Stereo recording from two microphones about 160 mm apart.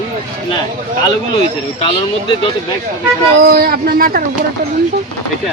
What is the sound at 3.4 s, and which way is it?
Speech, 70° right (ahead or behind).